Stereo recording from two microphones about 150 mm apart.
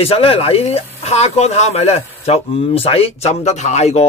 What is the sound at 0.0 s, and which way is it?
Speech, 40° left (ahead or behind).